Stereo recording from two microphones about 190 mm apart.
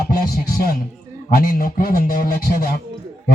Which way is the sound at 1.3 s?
50° left (ahead or behind).